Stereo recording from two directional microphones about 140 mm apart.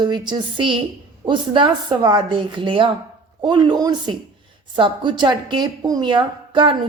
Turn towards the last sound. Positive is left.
turn(degrees=-35)  # may be behind; listen again after turning